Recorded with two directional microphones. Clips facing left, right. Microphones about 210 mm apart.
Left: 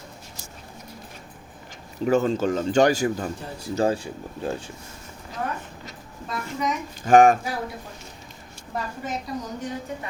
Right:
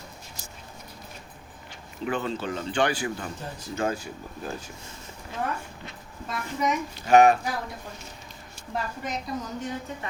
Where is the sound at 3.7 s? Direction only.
30° left (ahead or behind).